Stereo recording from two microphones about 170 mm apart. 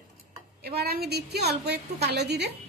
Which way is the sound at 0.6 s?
70° right (ahead or behind).